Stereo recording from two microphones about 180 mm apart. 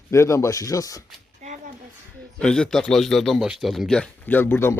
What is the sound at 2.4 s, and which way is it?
A man's voice, 5° left (ahead or behind).